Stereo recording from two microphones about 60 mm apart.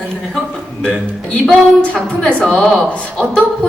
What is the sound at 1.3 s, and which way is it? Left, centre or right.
A woman's voice, centre.